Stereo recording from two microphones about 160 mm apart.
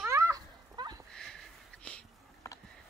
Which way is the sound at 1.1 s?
5° left (ahead or behind).